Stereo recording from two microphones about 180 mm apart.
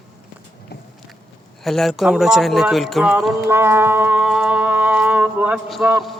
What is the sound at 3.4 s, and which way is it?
Music, 15° right (ahead or behind).